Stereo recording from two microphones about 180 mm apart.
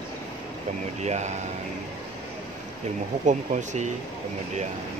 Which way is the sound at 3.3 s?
40° right (ahead or behind).